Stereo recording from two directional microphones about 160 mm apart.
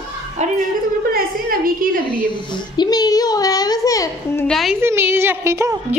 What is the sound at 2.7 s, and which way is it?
A child's voice, 25° left (ahead or behind).